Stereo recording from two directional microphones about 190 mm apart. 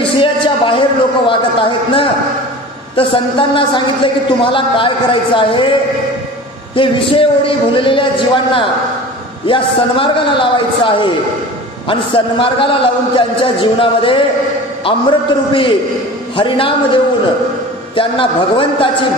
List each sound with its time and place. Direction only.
0.0 s a sound: 25° left (ahead or behind)
3.0 s a man's voice: 25° left (ahead or behind)
6.7 s a man's voice: 25° left (ahead or behind)
9.5 s a man's voice: 25° left (ahead or behind)
17.9 s a man's voice: 30° left (ahead or behind)